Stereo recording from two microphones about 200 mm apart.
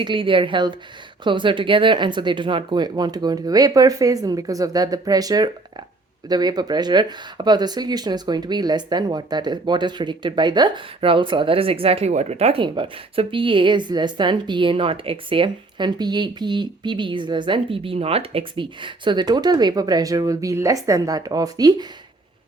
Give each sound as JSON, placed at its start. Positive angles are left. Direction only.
{"t": 0.0, "sound": "speech", "side_deg": -25}